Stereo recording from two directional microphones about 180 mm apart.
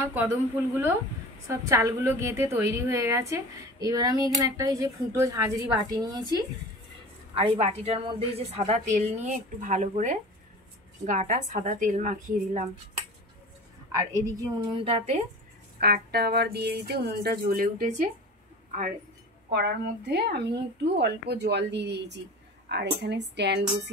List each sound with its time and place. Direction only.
0.0 s speech: 10° right (ahead or behind)
1.5 s a woman's voice: 15° right (ahead or behind)
7.3 s a woman's voice: 30° right (ahead or behind)
13.9 s a woman's voice: 20° right (ahead or behind)
14.9 s a woman's voice: 35° right (ahead or behind)
15.8 s speech: 60° right (ahead or behind)
19.5 s a woman's voice: 65° right (ahead or behind)